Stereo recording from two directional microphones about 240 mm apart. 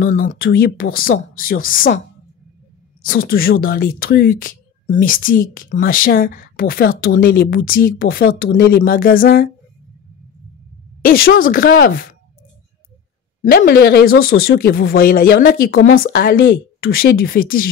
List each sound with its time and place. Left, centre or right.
0.0 s speech: left
3.0 s a woman's voice: left
11.0 s speech: left
13.4 s speech: left